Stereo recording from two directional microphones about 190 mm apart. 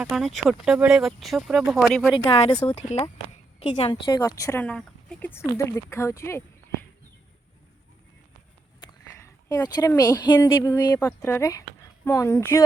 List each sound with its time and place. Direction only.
0.0 s speech: centre (ahead or behind)
2.1 s speech: 30° left (ahead or behind); by 6.4 s 15° left (ahead or behind)
8.8 s speech: 20° left (ahead or behind)